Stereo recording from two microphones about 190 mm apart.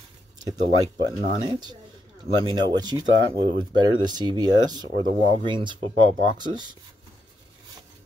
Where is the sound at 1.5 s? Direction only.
20° right (ahead or behind).